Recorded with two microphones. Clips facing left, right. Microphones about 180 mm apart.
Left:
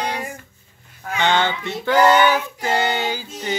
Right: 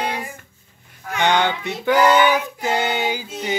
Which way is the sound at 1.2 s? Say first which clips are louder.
Right 1 dB; 15° right (ahead or behind).